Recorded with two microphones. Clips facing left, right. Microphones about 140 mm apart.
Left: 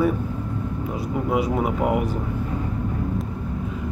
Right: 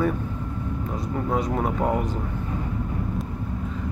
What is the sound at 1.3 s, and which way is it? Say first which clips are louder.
Speech: left 3 dB; 10° left (ahead or behind).